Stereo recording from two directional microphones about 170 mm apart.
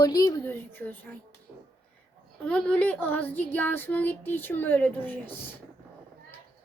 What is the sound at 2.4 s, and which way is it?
Female singing, 5° left (ahead or behind).